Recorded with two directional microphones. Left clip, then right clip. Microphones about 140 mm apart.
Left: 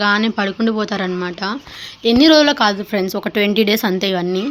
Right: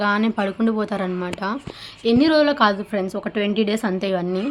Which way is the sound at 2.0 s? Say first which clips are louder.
Left 6 dB; 45° left (ahead or behind).